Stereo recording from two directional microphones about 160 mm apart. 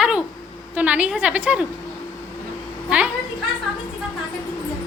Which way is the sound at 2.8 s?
5° right (ahead or behind).